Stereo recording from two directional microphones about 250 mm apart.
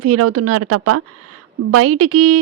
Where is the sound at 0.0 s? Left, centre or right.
Right.